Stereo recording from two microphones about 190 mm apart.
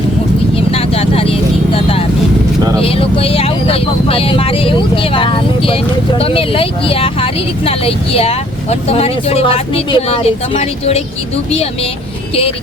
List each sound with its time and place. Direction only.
0.7 s vehicle: 30° left (ahead or behind)
2.8 s speech: 30° left (ahead or behind)